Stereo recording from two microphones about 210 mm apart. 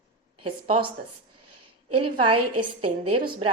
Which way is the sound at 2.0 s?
25° right (ahead or behind).